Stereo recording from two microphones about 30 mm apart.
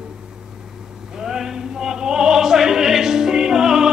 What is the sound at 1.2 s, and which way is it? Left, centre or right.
Opera, centre.